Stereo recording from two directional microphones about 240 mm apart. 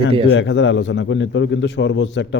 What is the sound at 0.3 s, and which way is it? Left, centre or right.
A man's voice, left.